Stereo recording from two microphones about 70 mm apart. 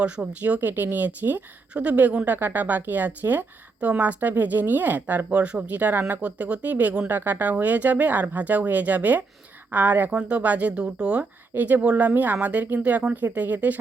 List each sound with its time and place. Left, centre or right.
0.0 s a woman's voice: centre
11.2 s a woman's voice: right